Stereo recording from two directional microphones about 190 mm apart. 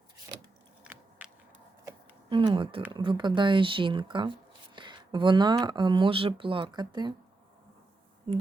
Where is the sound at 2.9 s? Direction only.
25° right (ahead or behind).